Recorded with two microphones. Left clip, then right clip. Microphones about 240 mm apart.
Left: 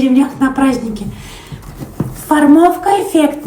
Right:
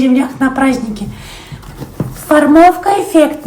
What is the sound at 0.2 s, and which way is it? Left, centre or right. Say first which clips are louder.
Speech: even; right.